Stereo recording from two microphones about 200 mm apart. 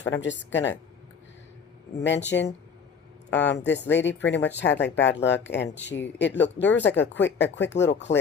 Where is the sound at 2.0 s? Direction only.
60° left (ahead or behind).